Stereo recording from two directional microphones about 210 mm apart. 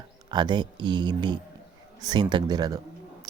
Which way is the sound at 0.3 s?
20° right (ahead or behind).